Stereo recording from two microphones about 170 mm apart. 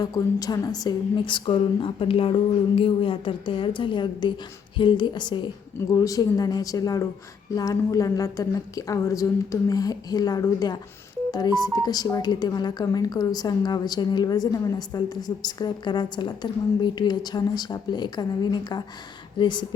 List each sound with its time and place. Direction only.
0.0 s speech: 20° left (ahead or behind)